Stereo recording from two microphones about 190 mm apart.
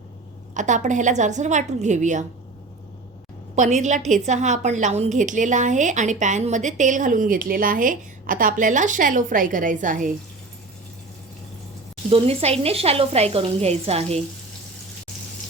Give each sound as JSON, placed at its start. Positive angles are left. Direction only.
{"t": 0.5, "sound": "a woman's voice", "side_deg": -40}
{"t": 3.5, "sound": "a woman's voice", "side_deg": -40}
{"t": 12.0, "sound": "a woman's voice", "side_deg": -30}